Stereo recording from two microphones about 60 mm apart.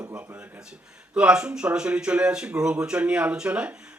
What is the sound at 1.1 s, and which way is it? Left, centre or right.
Speech, centre.